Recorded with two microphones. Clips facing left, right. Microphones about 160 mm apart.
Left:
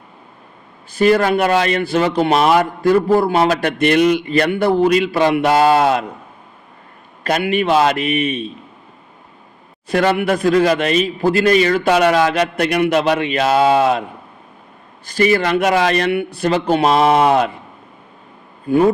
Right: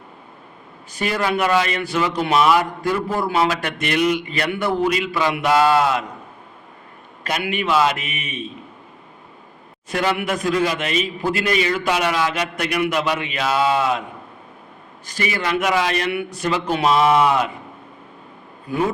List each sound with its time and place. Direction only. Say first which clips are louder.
1.3 s speech: left 4 dB; 40° left (ahead or behind)
2.3 s speech: even; 45° left (ahead or behind)
3.2 s speech: left 5 dB; 50° left (ahead or behind)
5.1 s a man's voice: left 6 dB; 55° left (ahead or behind)
5.4 s a man's voice: left 1 dB; 40° left (ahead or behind)
7.4 s speech: left 7 dB; 30° left (ahead or behind)
7.7 s speech: left 3 dB; 45° left (ahead or behind)
9.9 s speech: left 6 dB; 40° left (ahead or behind)
11.9 s a man's voice: left 7 dB; 50° left (ahead or behind)
13.3 s a man's voice: left 5 dB; 45° left (ahead or behind)
15.0 s a man's voice: left 9 dB; 35° left (ahead or behind)
16.3 s speech: left 5 dB; 30° left (ahead or behind)
16.7 s a man's voice: left 2 dB; 45° left (ahead or behind)